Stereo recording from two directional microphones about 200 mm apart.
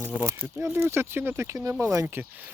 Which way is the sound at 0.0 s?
10° right (ahead or behind).